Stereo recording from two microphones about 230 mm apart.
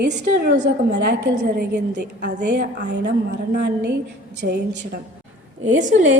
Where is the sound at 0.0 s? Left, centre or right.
Right.